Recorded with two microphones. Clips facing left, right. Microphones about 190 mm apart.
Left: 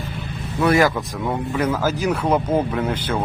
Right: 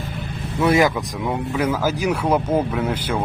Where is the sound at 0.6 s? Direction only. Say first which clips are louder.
Even; 20° right (ahead or behind).